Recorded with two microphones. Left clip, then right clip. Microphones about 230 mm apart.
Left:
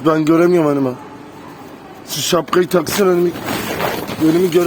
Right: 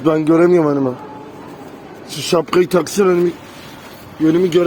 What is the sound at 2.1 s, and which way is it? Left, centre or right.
Speech, centre.